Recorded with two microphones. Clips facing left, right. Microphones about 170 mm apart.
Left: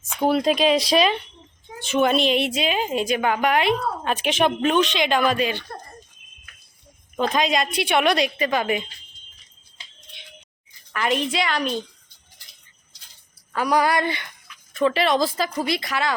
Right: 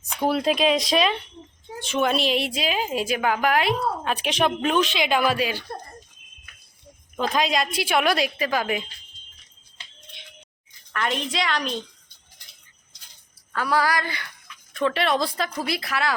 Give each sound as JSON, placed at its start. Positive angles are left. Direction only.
{"t": 0.2, "sound": "a woman's voice", "side_deg": 0}
{"t": 7.2, "sound": "a woman's voice", "side_deg": 0}
{"t": 10.9, "sound": "a woman's voice", "side_deg": 5}
{"t": 13.5, "sound": "speech", "side_deg": 15}
{"t": 14.7, "sound": "a woman's voice", "side_deg": 0}